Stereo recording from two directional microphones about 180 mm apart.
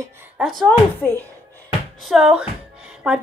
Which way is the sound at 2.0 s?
Centre (ahead or behind).